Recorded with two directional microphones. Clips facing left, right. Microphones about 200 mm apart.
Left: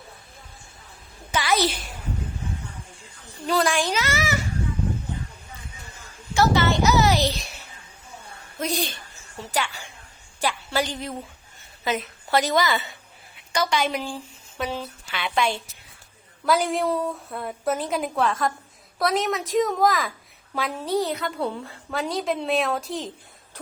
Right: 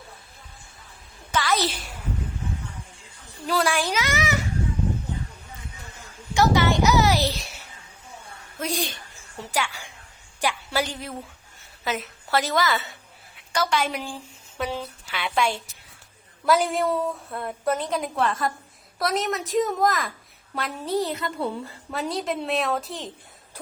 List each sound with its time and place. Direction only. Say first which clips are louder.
1.3 s a sound: left 1 dB; 10° left (ahead or behind)
1.5 s a child's voice: left 6 dB; centre (ahead or behind)
3.4 s a woman's voice: left 1 dB; 5° right (ahead or behind)
6.3 s speech: even; 15° right (ahead or behind)
8.6 s a woman's voice: left 1 dB; 10° right (ahead or behind)
15.1 s a woman's voice: even; 5° right (ahead or behind)